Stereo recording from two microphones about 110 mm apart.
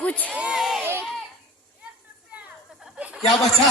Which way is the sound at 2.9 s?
10° right (ahead or behind).